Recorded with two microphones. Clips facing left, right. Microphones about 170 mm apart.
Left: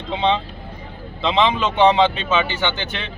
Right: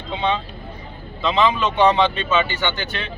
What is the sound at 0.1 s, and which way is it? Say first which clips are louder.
Speech: left 3 dB; 25° left (ahead or behind).